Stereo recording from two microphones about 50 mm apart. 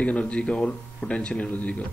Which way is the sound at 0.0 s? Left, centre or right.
Left.